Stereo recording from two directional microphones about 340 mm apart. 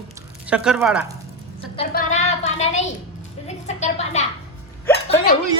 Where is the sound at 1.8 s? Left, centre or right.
Centre.